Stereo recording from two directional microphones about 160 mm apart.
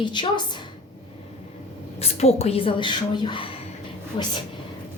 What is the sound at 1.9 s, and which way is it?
A woman's voice, 40° left (ahead or behind).